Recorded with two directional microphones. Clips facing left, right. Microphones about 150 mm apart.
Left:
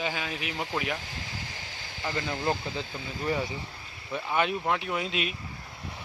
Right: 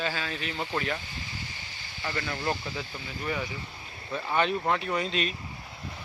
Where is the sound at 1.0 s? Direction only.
90° left.